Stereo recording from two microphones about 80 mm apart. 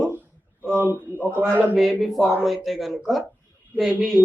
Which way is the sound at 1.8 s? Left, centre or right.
Centre.